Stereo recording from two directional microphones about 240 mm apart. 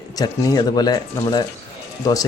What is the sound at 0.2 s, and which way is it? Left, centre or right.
Speech, centre.